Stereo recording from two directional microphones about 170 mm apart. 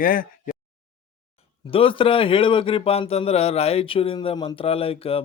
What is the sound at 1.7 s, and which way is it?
A man's voice, 30° left (ahead or behind).